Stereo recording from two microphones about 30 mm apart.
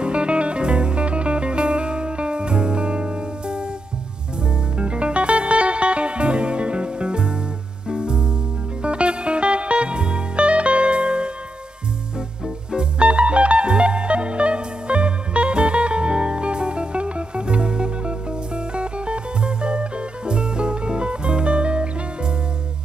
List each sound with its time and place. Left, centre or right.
0.0 s music: right
4.7 s music: right
12.7 s music: right